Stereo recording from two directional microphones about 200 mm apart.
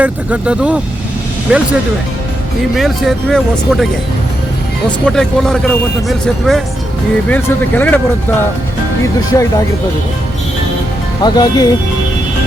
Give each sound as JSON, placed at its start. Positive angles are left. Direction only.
{"t": 0.0, "sound": "speech", "side_deg": -5}
{"t": 2.7, "sound": "speech", "side_deg": 0}
{"t": 4.9, "sound": "speech", "side_deg": 5}
{"t": 9.3, "sound": "speech", "side_deg": 15}
{"t": 11.2, "sound": "speech", "side_deg": 20}